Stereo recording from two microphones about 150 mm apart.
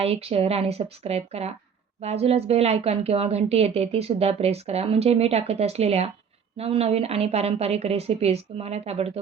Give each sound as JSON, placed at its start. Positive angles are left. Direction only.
{"t": 0.0, "sound": "speech", "side_deg": -40}